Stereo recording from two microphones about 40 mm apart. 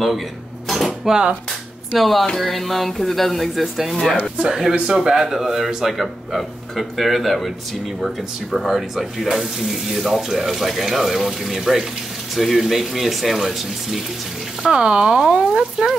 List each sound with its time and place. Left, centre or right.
0.7 s dishes: centre
1.0 s speech: centre
2.0 s a man's voice: centre
3.9 s speech: centre
4.4 s a man's voice: centre
14.7 s speech: right